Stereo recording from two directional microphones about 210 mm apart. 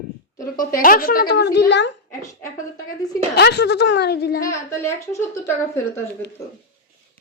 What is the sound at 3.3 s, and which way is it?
A woman's voice, 55° left (ahead or behind).